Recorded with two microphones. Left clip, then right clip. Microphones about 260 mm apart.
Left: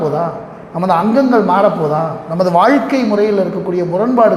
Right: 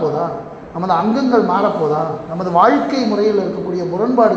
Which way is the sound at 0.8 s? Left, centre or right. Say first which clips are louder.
Left 4 dB; left.